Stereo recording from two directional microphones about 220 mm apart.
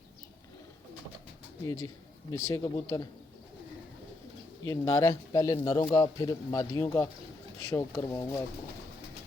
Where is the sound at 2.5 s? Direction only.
15° left (ahead or behind).